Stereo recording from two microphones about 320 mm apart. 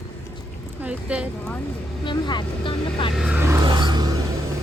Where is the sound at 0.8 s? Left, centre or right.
Centre.